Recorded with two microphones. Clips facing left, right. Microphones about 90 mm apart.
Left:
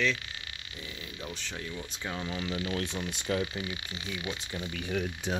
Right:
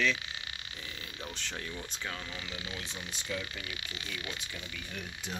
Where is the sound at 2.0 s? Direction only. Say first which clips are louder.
Left 8 dB; 25° left (ahead or behind).